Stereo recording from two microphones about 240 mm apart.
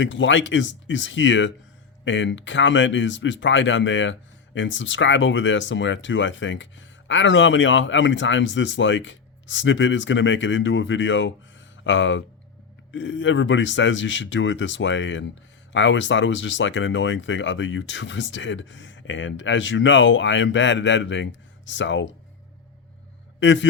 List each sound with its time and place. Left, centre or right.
0.0 s speech: left
23.4 s a man's voice: left